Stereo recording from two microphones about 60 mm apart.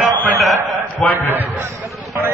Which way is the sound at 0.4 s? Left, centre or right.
Centre.